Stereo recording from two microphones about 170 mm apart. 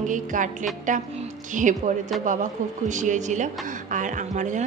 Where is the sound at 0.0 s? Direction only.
50° right (ahead or behind).